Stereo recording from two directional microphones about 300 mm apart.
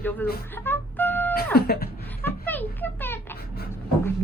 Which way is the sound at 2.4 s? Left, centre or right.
Centre.